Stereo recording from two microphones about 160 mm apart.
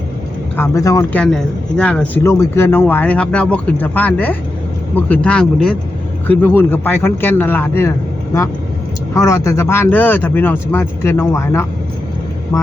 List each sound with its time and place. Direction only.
0.5 s speech: 15° left (ahead or behind)
1.1 s speech: 5° left (ahead or behind)